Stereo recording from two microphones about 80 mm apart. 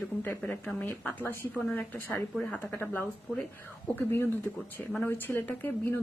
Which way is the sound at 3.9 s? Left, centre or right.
Left.